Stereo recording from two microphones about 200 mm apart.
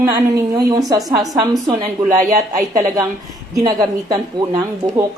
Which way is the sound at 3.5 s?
20° right (ahead or behind).